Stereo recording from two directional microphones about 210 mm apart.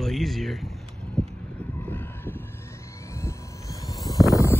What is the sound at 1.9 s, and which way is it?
Vehicle, 10° left (ahead or behind).